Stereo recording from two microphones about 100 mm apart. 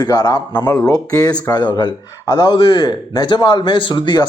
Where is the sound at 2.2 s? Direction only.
25° left (ahead or behind).